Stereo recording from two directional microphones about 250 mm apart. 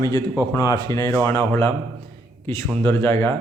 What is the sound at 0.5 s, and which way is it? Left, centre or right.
Speech, centre.